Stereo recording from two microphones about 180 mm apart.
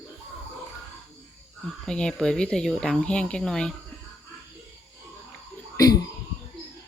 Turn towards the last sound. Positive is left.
turn(degrees=20)  # may be behind; listen again after turning